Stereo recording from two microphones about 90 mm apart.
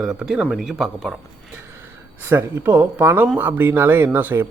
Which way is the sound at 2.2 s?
25° right (ahead or behind).